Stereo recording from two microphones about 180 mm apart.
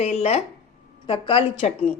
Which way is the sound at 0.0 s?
35° left (ahead or behind).